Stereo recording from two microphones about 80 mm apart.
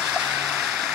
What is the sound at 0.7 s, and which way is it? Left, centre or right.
Music, centre.